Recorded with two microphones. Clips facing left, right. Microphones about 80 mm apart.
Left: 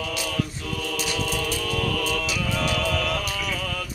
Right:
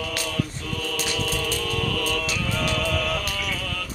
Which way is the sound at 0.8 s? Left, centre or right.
Centre.